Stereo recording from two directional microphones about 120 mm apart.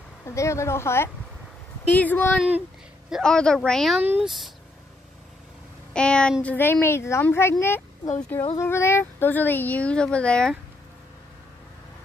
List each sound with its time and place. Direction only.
0.2 s speech: 25° left (ahead or behind); by 4.0 s centre (ahead or behind)
4.0 s speech: 15° right (ahead or behind)
5.9 s speech: 10° left (ahead or behind)